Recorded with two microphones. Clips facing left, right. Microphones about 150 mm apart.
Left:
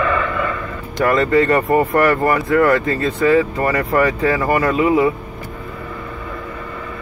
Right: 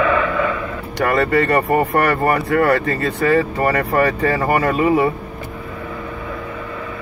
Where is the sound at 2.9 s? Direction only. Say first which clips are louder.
Left 2 dB; 60° right (ahead or behind).